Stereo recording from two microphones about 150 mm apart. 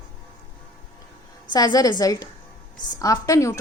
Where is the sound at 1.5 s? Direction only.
25° left (ahead or behind).